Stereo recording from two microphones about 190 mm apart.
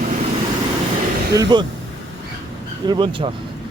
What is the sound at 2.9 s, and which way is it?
Speech, 25° right (ahead or behind).